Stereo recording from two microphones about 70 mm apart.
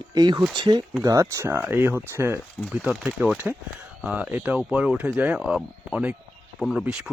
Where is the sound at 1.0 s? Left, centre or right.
Right.